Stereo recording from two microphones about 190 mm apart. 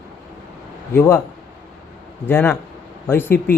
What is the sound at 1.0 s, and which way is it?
Speech, 15° left (ahead or behind).